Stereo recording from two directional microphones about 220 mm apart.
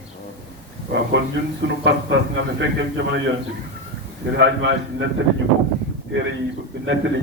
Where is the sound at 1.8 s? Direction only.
55° right (ahead or behind).